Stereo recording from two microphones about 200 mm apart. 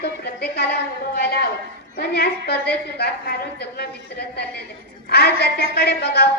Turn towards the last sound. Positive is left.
turn(degrees=55)  # may be behind; listen again after turning